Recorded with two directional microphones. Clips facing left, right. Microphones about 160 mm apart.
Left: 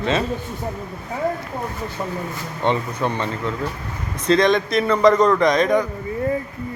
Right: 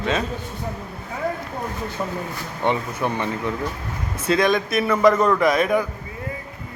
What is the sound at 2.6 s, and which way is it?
A man's voice, 15° right (ahead or behind).